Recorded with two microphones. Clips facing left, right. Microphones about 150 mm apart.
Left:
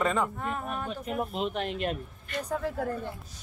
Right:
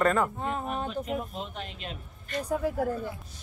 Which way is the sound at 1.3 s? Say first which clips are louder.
Left 7 dB; 75° left (ahead or behind).